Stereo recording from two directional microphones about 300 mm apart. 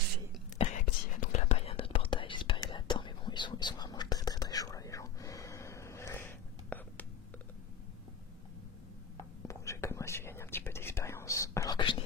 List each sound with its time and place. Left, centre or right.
0.6 s a sound: centre
1.1 s whispering: left; by 7.1 s centre
9.5 s whispering: centre